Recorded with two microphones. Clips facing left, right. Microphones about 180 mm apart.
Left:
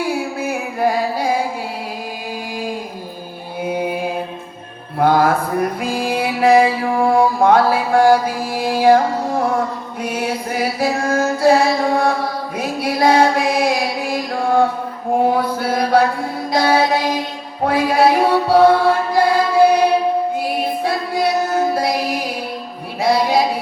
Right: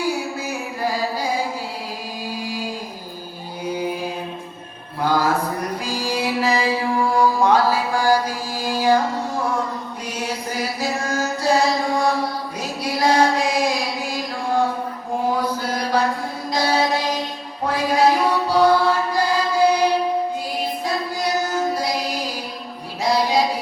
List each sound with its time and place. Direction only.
0.0 s music: 55° left (ahead or behind)
3.6 s mantra: 55° left (ahead or behind)
4.9 s music: 55° left (ahead or behind)
5.8 s mantra: 55° left (ahead or behind)
10.0 s chant: 55° left (ahead or behind)
15.3 s mantra: 60° left (ahead or behind)
16.5 s music: 55° left (ahead or behind)
23.0 s a sound: 55° left (ahead or behind)